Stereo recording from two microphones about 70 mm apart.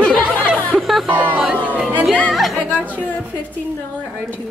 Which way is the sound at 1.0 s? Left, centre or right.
Right.